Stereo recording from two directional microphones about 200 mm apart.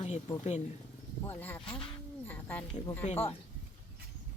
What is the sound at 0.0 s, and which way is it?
Speech, 35° left (ahead or behind).